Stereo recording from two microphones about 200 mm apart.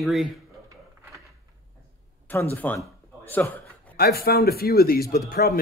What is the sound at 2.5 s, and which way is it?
Speech, 10° left (ahead or behind).